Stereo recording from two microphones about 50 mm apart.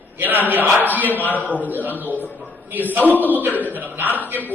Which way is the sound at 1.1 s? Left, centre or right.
Left.